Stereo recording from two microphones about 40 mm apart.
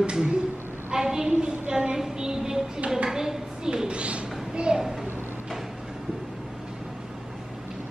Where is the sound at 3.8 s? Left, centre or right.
Right.